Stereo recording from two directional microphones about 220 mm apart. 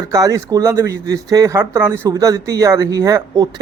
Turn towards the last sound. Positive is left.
turn(degrees=-15)  # may be behind; listen again after turning